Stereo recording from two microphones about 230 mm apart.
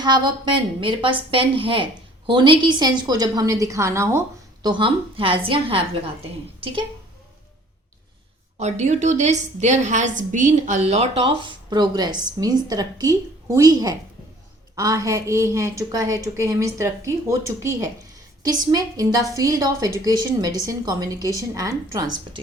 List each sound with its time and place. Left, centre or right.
0.0 s a woman's voice: centre
8.5 s a woman's voice: right